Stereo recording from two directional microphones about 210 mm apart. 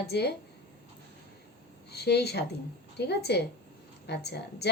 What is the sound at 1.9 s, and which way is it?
Speech, 50° left (ahead or behind).